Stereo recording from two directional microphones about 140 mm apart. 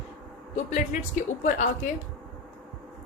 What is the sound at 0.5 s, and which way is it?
Speech, 60° left (ahead or behind).